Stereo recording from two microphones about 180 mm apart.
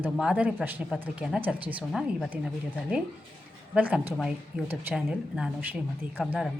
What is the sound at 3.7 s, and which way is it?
A woman's voice, 10° right (ahead or behind).